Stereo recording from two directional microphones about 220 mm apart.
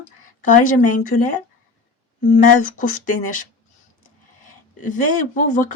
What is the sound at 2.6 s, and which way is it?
Speech, 35° left (ahead or behind).